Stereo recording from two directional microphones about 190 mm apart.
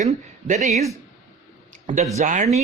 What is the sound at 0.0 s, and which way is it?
Speech, 40° right (ahead or behind).